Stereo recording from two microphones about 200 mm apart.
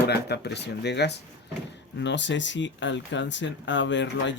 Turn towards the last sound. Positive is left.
turn(degrees=65)  # may be behind; listen again after turning